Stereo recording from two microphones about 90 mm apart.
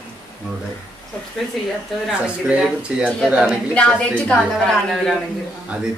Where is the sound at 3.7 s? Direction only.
15° left (ahead or behind).